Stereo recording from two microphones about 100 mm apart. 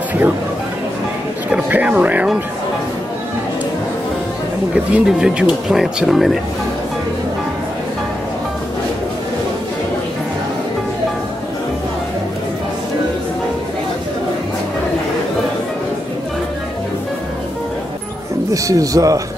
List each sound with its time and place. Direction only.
1.5 s speech: 15° right (ahead or behind)
4.9 s speech: 10° right (ahead or behind)
18.5 s speech: 35° right (ahead or behind)